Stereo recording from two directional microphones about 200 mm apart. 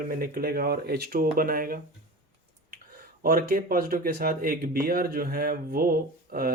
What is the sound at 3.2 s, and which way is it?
Speech, 45° right (ahead or behind).